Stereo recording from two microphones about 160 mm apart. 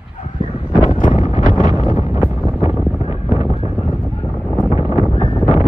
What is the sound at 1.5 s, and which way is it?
Wind noise, 30° right (ahead or behind).